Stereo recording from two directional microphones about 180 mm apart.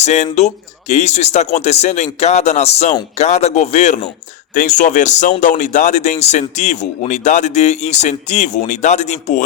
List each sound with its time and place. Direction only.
0.0 s speech: 40° left (ahead or behind)